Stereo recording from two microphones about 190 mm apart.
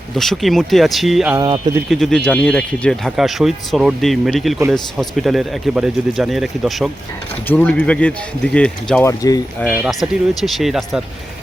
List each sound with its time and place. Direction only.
0.2 s speech: centre (ahead or behind)
1.4 s speech: 25° right (ahead or behind)
1.9 s speech: centre (ahead or behind)
9.0 s speech: 20° left (ahead or behind)
9.6 s speech: centre (ahead or behind)